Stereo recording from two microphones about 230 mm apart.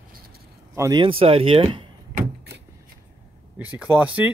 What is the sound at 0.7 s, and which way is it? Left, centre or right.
Speech, centre.